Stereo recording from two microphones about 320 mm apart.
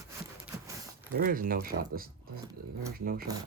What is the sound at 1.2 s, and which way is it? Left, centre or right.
Speech, right.